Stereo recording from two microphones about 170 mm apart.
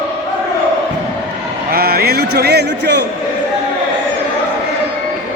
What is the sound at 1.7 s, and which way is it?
A man's voice, 65° right (ahead or behind).